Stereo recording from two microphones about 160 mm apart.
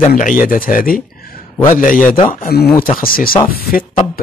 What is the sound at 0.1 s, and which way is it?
Speech, 55° left (ahead or behind).